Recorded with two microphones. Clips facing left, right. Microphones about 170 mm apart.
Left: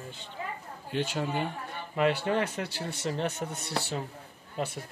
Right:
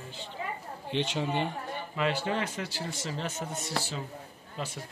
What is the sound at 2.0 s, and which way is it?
Speech, 55° left (ahead or behind).